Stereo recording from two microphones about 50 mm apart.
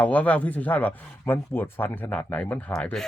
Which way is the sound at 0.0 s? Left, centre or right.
Left.